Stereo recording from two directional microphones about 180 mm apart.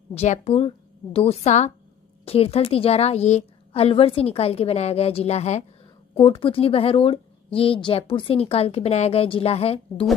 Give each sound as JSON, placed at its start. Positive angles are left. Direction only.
{"t": 0.1, "sound": "speech", "side_deg": 35}